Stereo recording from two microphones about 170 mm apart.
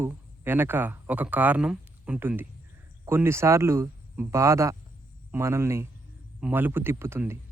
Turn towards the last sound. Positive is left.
turn(degrees=-15)  # may be behind; listen again after turning